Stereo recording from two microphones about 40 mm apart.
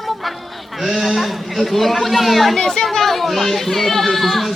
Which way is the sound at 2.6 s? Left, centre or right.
Centre.